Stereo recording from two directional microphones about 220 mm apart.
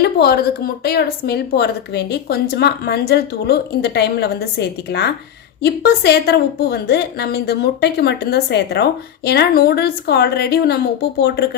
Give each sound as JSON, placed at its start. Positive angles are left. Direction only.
{"t": 0.0, "sound": "speech", "side_deg": 45}